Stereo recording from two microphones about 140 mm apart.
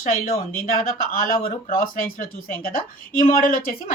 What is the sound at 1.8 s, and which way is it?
A woman's voice, 90° left.